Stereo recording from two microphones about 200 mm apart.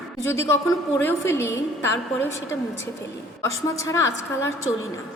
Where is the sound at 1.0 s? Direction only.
10° left (ahead or behind).